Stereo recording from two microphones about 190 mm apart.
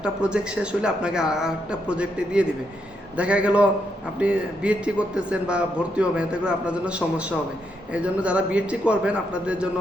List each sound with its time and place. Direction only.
0.0 s a man's voice: 5° right (ahead or behind)